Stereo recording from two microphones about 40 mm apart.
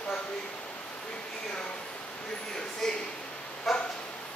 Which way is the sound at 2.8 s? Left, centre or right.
Centre.